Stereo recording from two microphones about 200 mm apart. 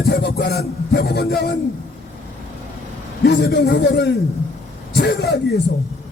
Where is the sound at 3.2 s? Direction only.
55° left (ahead or behind).